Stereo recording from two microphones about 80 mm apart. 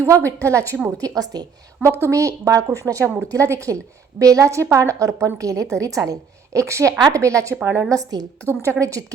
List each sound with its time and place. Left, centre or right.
0.0 s a woman's voice: right
1.8 s a woman's voice: right
8.6 s a woman's voice: right